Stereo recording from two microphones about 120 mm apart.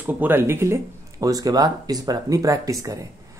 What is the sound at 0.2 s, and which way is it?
Speech, 20° right (ahead or behind).